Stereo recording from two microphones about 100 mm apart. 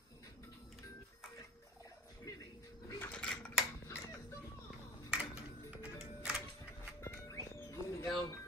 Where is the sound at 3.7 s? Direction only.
25° left (ahead or behind).